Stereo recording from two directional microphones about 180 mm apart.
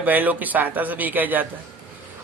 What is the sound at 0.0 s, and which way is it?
Speech, 10° right (ahead or behind).